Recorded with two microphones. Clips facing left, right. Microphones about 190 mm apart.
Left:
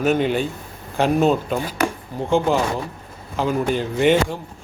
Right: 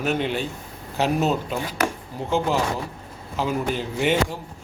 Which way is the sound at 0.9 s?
50° left (ahead or behind).